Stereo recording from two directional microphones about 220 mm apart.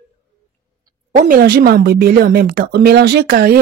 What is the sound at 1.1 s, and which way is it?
A woman's voice, 35° right (ahead or behind).